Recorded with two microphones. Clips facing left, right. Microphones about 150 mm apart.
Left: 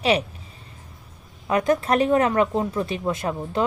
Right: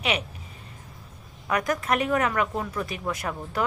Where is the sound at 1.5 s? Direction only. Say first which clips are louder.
Left 5 dB; 25° left (ahead or behind).